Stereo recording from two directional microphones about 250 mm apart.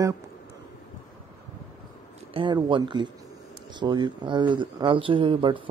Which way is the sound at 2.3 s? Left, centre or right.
Centre.